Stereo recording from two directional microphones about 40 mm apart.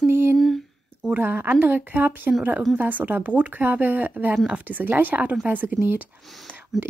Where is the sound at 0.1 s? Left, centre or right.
Right.